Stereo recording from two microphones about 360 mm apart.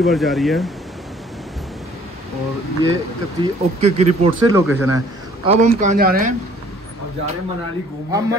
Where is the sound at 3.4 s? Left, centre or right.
Centre.